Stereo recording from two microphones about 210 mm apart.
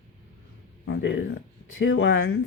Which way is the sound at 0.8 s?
60° left (ahead or behind).